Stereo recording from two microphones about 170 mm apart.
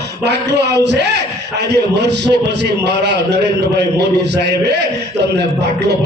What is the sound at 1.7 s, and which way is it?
A man's voice, 80° right.